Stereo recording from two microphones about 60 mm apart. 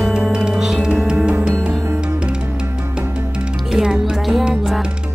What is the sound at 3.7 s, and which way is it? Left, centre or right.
Music, centre.